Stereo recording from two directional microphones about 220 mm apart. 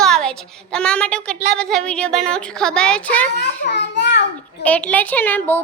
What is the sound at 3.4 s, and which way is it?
Speech, 50° left (ahead or behind).